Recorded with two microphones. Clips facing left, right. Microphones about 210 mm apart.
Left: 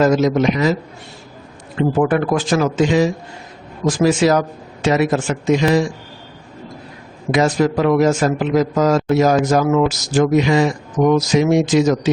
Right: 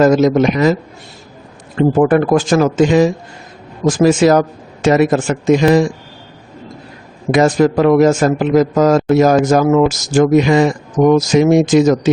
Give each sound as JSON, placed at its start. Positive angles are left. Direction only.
{"t": 0.0, "sound": "a man's voice", "side_deg": -50}
{"t": 2.0, "sound": "a man's voice", "side_deg": -45}
{"t": 7.3, "sound": "a man's voice", "side_deg": -50}